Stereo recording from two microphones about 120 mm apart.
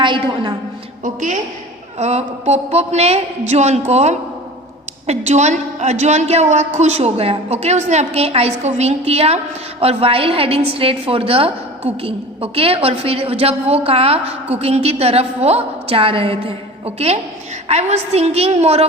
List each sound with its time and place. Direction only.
0.0 s a woman's voice: 40° right (ahead or behind)
1.0 s a woman's voice: 90° right
2.0 s a woman's voice: 65° right (ahead or behind)